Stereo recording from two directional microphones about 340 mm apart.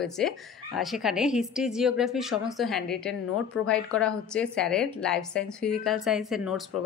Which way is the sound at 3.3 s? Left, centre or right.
Left.